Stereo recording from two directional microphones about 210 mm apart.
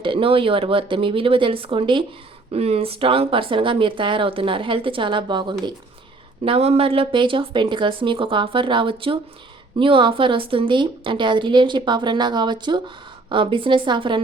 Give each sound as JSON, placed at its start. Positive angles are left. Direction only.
{"t": 0.0, "sound": "speech", "side_deg": -25}